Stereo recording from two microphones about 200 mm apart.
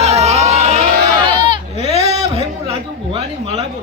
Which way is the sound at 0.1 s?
30° right (ahead or behind).